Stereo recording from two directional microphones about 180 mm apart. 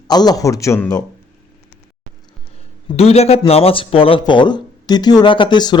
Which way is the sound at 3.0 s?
35° left (ahead or behind).